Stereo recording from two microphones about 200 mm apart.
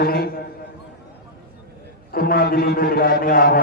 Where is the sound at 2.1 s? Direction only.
50° left (ahead or behind).